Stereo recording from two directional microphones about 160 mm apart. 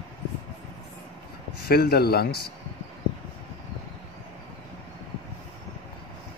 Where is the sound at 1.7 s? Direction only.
75° left (ahead or behind).